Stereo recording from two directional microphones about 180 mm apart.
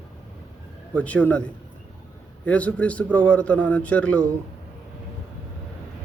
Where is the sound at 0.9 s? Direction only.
10° left (ahead or behind).